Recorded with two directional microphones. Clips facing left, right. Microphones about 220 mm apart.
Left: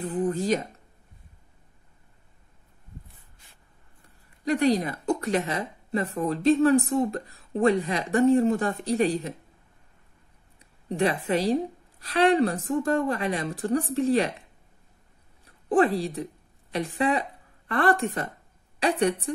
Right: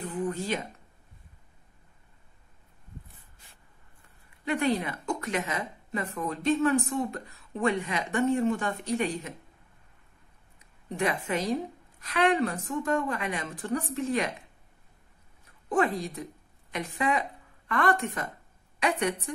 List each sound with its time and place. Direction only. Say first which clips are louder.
0.0 s speech: left 5 dB; 35° left (ahead or behind)
4.5 s a woman's voice: left 5 dB; 35° left (ahead or behind)
10.9 s a woman's voice: left 5 dB; 35° left (ahead or behind)
15.4 s a woman's voice: left 5 dB; 35° left (ahead or behind)